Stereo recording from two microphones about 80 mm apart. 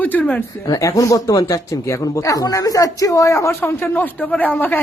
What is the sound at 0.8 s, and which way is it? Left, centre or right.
Speech, left.